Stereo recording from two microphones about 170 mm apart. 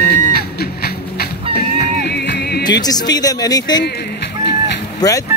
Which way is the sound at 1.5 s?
60° left (ahead or behind).